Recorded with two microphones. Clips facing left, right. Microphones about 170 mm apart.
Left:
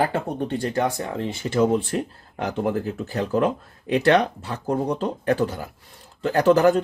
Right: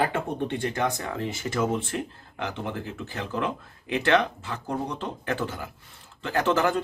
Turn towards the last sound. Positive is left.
turn(degrees=40)  # may be behind; listen again after turning